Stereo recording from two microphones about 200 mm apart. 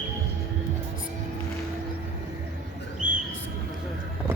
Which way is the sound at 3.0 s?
40° right (ahead or behind).